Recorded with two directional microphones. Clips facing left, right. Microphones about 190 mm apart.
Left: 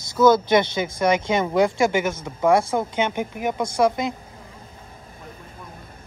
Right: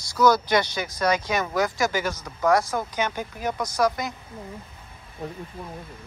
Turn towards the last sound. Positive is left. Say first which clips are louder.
# left 4 dB
turn(degrees=25)  # may be behind; listen again after turning